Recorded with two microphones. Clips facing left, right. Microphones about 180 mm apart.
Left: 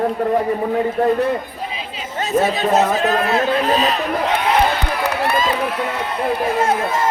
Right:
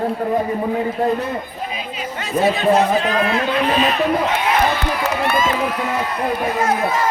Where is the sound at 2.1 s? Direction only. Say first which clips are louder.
Left 1 dB; 45° left (ahead or behind).